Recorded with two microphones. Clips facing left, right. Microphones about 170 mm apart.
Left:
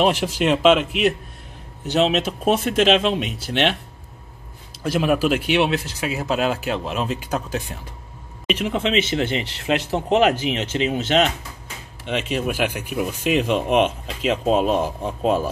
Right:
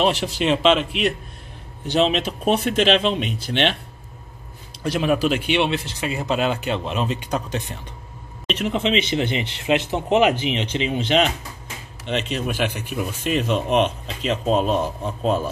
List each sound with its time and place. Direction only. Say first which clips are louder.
0.0 s speech: left 1 dB; 5° left (ahead or behind)
4.8 s speech: left 1 dB; 5° left (ahead or behind)
10.9 s speech: even; 5° left (ahead or behind)